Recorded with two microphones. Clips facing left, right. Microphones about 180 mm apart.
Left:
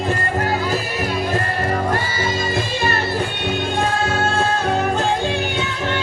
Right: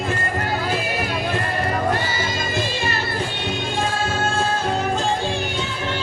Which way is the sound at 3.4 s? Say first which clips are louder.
Left 3 dB; 60° left (ahead or behind).